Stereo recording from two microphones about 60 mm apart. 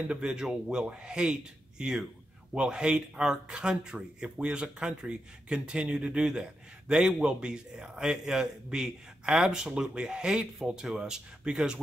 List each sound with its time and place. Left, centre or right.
0.1 s a man's voice: centre